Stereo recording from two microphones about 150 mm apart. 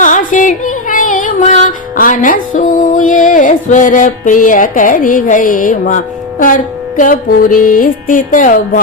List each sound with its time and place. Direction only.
0.0 s music: 60° left (ahead or behind)